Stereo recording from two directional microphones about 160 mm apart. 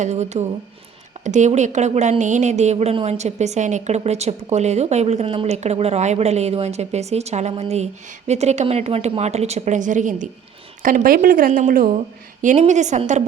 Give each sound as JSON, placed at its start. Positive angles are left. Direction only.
{"t": 0.0, "sound": "a woman's voice", "side_deg": -45}
{"t": 10.8, "sound": "a woman's voice", "side_deg": -60}